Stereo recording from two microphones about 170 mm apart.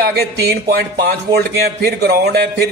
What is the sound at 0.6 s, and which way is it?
A man's voice, 70° right (ahead or behind).